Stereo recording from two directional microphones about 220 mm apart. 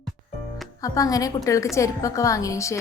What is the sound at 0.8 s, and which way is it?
A woman's voice, 15° left (ahead or behind).